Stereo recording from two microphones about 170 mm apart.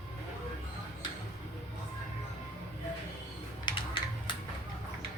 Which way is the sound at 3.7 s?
25° left (ahead or behind).